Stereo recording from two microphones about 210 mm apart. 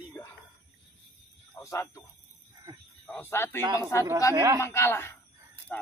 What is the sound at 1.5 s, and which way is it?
Speech, 15° left (ahead or behind).